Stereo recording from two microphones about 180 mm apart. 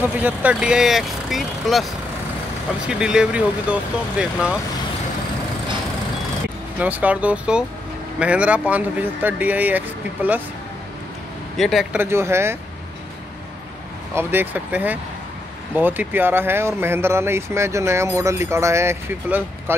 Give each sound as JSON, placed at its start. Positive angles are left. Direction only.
{"t": 0.0, "sound": "speech", "side_deg": -10}
{"t": 2.9, "sound": "speech", "side_deg": -5}
{"t": 6.8, "sound": "speech", "side_deg": -10}
{"t": 11.5, "sound": "speech", "side_deg": 0}
{"t": 14.1, "sound": "speech", "side_deg": -10}